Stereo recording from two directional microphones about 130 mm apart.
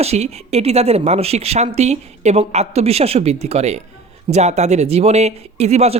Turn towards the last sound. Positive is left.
turn(degrees=-55)  # may be behind; listen again after turning